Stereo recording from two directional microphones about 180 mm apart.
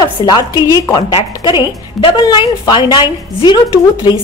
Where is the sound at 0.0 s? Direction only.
25° left (ahead or behind).